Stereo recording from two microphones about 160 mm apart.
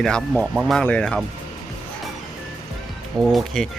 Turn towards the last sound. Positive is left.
turn(degrees=0)  # may be behind; listen again after turning